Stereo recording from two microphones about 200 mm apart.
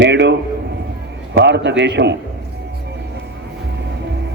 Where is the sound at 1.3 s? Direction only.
60° right (ahead or behind).